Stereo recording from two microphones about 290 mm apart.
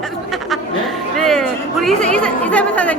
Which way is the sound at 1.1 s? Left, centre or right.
Centre.